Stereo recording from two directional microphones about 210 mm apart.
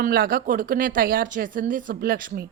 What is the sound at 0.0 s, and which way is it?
A woman's voice, 45° right (ahead or behind).